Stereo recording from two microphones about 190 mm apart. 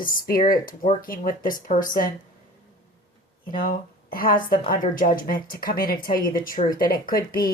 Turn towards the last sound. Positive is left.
turn(degrees=50)  # may be behind; listen again after turning